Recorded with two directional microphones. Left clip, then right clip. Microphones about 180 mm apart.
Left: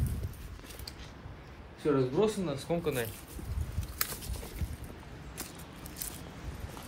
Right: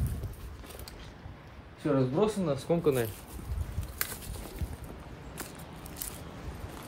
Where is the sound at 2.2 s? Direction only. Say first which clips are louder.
Right 1 dB; 60° right (ahead or behind).